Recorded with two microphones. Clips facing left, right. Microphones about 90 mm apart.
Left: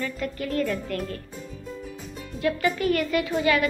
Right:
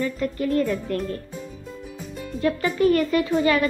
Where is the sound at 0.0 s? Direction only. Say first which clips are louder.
Right 5 dB; 30° right (ahead or behind).